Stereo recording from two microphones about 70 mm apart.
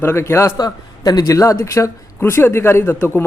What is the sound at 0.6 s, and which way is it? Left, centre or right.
Speech, left.